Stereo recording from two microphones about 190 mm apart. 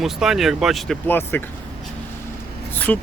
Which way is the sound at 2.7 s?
10° left (ahead or behind).